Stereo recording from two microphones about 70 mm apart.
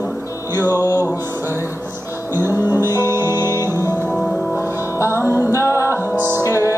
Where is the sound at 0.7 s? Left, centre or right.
Left.